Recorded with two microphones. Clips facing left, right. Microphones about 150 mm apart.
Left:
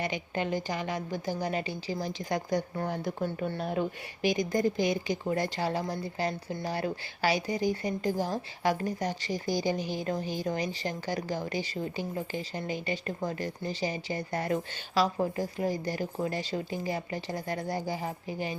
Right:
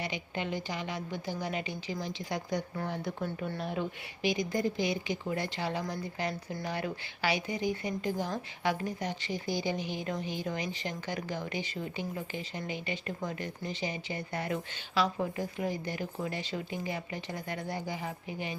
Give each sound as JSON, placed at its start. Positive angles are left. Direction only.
{"t": 0.0, "sound": "a woman's voice", "side_deg": 45}